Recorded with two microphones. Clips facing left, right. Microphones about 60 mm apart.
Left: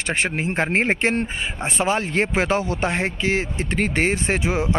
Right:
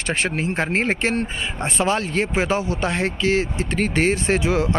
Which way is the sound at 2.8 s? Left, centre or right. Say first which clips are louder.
Right 4 dB; left.